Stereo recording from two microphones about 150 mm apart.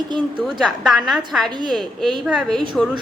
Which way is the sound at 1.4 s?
30° right (ahead or behind).